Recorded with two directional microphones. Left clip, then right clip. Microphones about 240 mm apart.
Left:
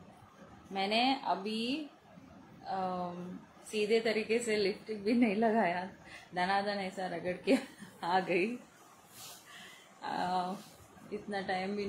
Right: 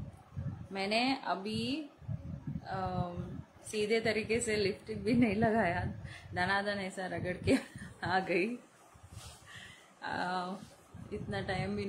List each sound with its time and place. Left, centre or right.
0.7 s a woman's voice: centre
9.5 s a sound: right
11.1 s a woman's voice: right